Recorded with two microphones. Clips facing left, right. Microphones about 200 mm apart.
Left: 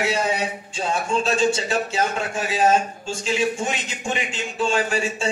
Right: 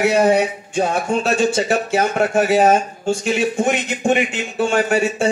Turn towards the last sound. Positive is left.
turn(degrees=-60)  # may be behind; listen again after turning